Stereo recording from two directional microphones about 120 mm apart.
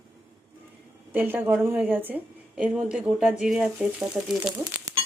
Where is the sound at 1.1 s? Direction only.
15° right (ahead or behind).